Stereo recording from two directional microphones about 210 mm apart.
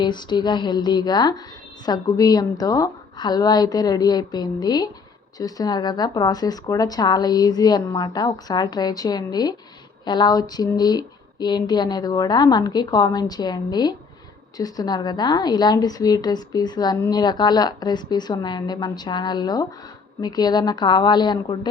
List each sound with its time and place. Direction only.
0.0 s a woman's voice: 20° left (ahead or behind)